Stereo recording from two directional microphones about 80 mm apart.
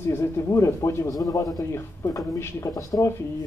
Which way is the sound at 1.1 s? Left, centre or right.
Left.